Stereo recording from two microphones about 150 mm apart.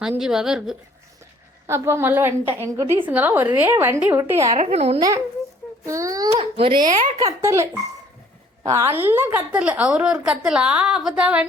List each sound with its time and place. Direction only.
0.2 s speech: 5° right (ahead or behind)
1.6 s a woman's voice: 20° right (ahead or behind)
4.5 s speech: 45° right (ahead or behind)
4.9 s a child's voice: 25° right (ahead or behind)
6.3 s a child's voice: 40° right (ahead or behind)
6.8 s speech: 50° right (ahead or behind)
7.2 s a child's voice: 20° right (ahead or behind)